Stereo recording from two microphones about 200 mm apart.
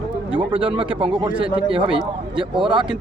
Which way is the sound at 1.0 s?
25° right (ahead or behind).